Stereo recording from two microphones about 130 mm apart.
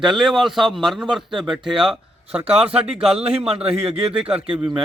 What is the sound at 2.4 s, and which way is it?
Speech, 45° right (ahead or behind).